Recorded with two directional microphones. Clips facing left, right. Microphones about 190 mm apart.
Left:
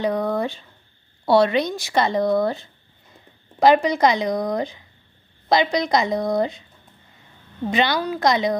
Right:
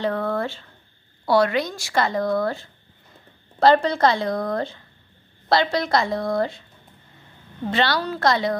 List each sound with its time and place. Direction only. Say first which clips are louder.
0.0 s speech: left 2 dB; 15° left (ahead or behind)
7.6 s speech: left 1 dB; 15° left (ahead or behind)